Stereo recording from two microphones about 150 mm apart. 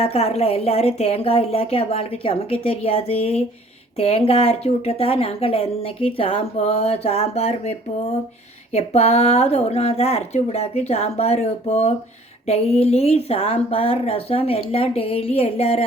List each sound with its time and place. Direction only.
0.0 s a woman's voice: 45° left (ahead or behind)
8.7 s a woman's voice: 45° left (ahead or behind)